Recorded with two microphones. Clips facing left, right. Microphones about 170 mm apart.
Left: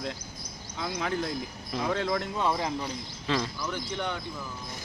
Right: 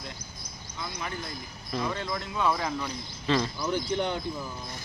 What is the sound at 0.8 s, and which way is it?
Speech, 85° left.